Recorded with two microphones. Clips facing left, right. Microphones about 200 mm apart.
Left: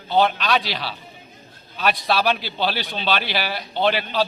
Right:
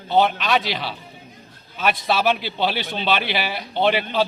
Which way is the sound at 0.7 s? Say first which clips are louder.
Right 2 dB; 55° right (ahead or behind).